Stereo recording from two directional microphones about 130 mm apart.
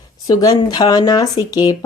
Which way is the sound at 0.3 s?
30° left (ahead or behind).